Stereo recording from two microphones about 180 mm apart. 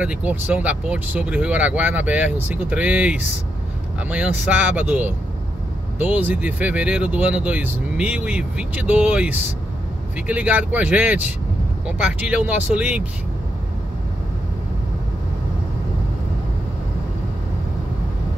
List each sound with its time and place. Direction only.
0.0 s speech: 5° right (ahead or behind)
4.5 s speech: 10° right (ahead or behind)